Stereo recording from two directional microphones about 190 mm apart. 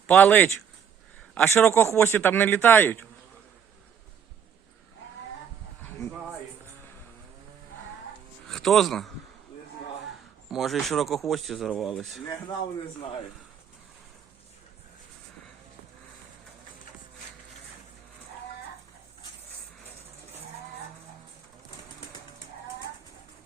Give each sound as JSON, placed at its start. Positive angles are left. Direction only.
{"t": 0.1, "sound": "a man's voice", "side_deg": 10}
{"t": 8.4, "sound": "speech", "side_deg": 0}
{"t": 10.5, "sound": "speech", "side_deg": 0}
{"t": 12.2, "sound": "speech", "side_deg": 20}